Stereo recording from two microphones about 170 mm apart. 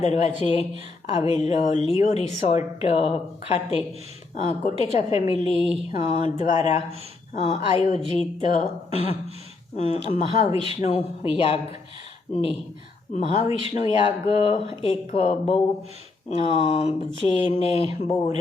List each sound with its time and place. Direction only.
0.0 s a woman's voice: 40° left (ahead or behind)